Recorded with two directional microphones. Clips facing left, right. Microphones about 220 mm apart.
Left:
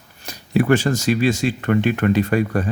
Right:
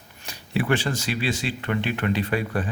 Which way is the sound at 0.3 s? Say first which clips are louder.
Left 7 dB; 45° left (ahead or behind).